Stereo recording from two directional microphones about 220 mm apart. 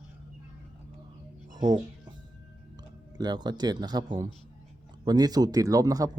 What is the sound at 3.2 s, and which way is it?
A man's voice, 20° right (ahead or behind).